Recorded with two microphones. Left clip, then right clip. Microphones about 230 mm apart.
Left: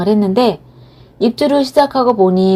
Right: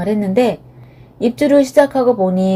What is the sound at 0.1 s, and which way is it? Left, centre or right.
Speech, centre.